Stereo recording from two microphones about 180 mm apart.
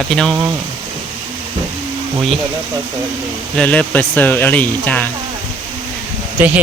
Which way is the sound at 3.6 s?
10° left (ahead or behind).